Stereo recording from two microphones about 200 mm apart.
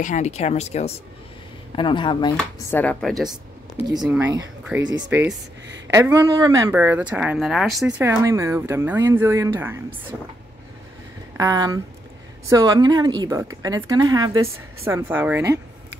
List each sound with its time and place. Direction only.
0.0 s speech: 35° left (ahead or behind)
2.3 s speech: 5° left (ahead or behind)
3.8 s a woman's voice: 20° right (ahead or behind); by 7.9 s centre (ahead or behind)
8.0 s a woman's voice: 15° right (ahead or behind)
11.3 s a woman's voice: 20° right (ahead or behind)